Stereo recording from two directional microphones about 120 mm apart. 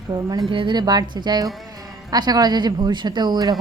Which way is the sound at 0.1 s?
35° right (ahead or behind).